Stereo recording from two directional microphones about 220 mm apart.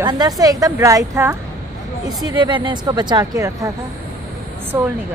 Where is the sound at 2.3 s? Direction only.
20° right (ahead or behind).